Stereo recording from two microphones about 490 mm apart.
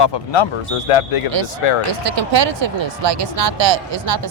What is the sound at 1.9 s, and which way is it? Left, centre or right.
Speech, right.